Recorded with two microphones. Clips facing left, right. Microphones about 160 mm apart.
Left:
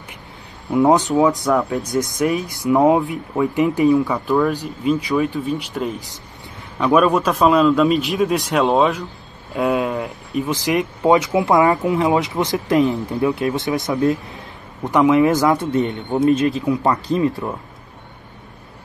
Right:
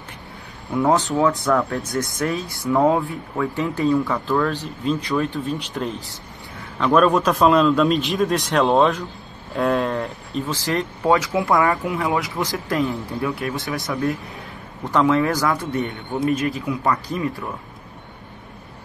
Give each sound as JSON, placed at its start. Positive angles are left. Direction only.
{"t": 0.7, "sound": "a man's voice", "side_deg": 20}